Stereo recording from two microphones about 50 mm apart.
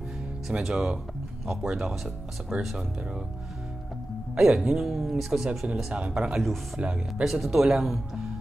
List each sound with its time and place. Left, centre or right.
0.5 s speech: centre
2.5 s speech: right
4.4 s speech: centre
5.9 s speech: right
7.2 s speech: centre